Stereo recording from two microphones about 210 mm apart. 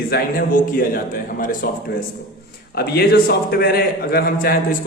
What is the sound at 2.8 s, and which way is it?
A man's voice, 45° left (ahead or behind).